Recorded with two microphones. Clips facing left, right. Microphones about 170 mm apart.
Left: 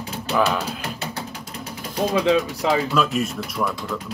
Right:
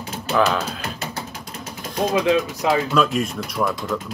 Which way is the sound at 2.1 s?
35° left (ahead or behind).